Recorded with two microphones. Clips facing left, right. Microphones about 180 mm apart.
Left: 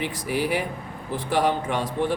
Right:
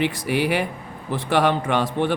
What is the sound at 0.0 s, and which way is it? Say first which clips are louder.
Speech: right 4 dB; 70° right (ahead or behind).